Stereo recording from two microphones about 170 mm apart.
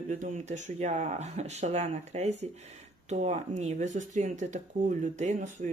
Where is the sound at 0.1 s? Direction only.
45° right (ahead or behind).